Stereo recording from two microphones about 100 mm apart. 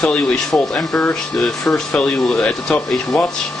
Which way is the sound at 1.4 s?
5° left (ahead or behind).